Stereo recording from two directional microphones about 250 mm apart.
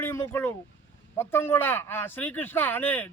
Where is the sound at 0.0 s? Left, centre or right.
Centre.